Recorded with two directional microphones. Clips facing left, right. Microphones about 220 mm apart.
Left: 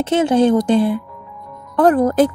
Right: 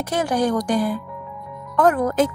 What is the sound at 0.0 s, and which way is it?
Speech, 25° left (ahead or behind).